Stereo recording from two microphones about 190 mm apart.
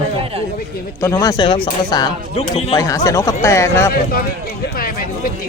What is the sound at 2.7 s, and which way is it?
Speech, 15° left (ahead or behind).